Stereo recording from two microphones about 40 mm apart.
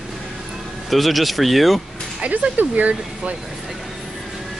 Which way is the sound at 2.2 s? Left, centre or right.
Right.